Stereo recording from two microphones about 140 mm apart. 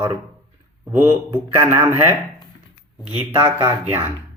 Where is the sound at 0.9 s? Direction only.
15° right (ahead or behind).